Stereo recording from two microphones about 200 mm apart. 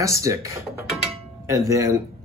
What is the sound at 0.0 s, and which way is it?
Speech, 15° right (ahead or behind).